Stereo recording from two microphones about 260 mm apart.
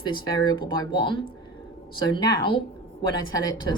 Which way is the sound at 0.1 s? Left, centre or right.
Centre.